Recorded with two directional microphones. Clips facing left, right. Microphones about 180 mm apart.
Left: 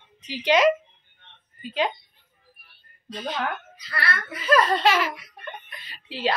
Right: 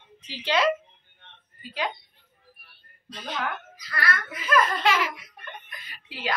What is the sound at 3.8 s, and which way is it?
A child's voice, 30° left (ahead or behind).